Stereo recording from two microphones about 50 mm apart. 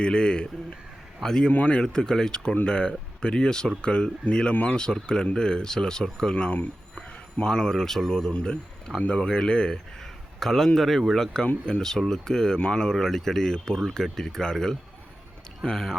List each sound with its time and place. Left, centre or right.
0.0 s speech: centre
7.4 s speech: centre
8.3 s a man's voice: left